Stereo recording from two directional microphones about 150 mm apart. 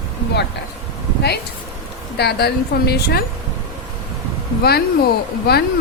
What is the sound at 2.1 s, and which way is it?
A woman's voice, 90° left.